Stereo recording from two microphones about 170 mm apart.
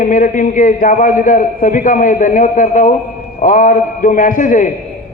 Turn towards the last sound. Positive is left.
turn(degrees=50)  # may be behind; listen again after turning